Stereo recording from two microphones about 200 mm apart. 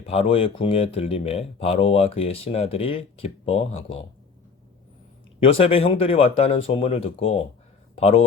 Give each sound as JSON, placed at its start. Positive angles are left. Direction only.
{"t": 0.1, "sound": "speech", "side_deg": 25}
{"t": 5.4, "sound": "speech", "side_deg": 30}